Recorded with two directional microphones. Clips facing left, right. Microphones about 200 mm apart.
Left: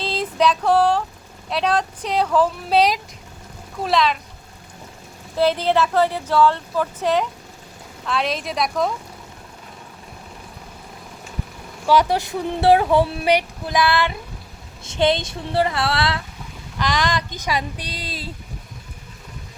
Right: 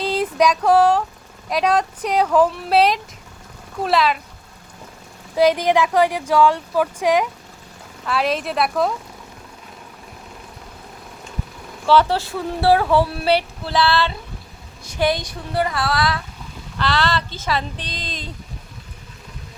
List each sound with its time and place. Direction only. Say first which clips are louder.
0.0 s female singing: right 2 dB; 10° right (ahead or behind)
0.6 s speech: right 2 dB; 10° right (ahead or behind)
5.4 s speech: right 2 dB; 15° right (ahead or behind)
11.9 s speech: right 1 dB; 15° left (ahead or behind)
16.7 s speech: right 1 dB; 15° left (ahead or behind)